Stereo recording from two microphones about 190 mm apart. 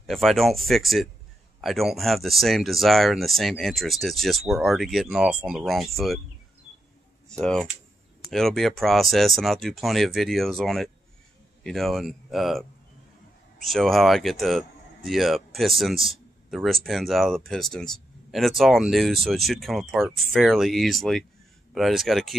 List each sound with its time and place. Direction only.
0.0 s speech: centre (ahead or behind)
7.2 s speech: 5° left (ahead or behind)